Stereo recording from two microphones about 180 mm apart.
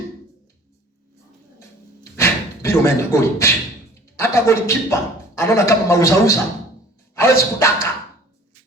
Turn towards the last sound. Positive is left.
turn(degrees=15)  # may be behind; listen again after turning